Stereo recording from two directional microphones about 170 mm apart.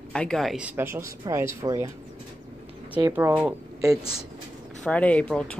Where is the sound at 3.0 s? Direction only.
15° right (ahead or behind).